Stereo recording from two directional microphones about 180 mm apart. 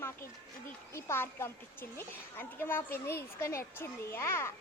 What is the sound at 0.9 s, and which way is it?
A child's voice, 15° left (ahead or behind).